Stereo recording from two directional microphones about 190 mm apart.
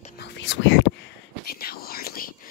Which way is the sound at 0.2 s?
65° left (ahead or behind).